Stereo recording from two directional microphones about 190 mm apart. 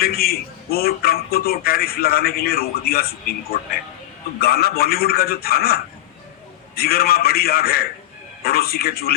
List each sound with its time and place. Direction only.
0.0 s a man's voice: 55° left (ahead or behind)